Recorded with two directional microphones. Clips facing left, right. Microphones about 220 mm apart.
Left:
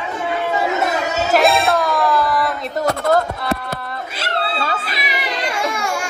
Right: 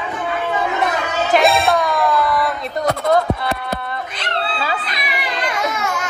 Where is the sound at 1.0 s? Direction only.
40° left (ahead or behind).